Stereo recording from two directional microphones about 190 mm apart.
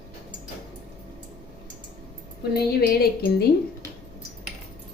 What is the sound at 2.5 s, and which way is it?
Speech, 55° left (ahead or behind).